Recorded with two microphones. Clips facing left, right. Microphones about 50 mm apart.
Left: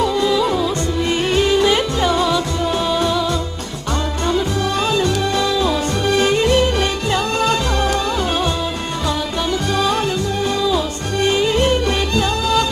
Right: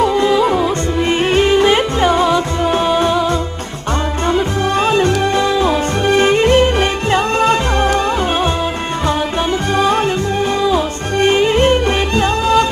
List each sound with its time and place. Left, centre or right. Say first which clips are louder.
0.0 s music: right 4 dB; right
4.9 s music: right 4 dB; right
10.6 s music: right 3 dB; right